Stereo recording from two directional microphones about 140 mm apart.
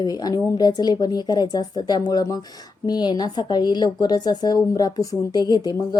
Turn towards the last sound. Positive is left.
turn(degrees=30)  # may be behind; listen again after turning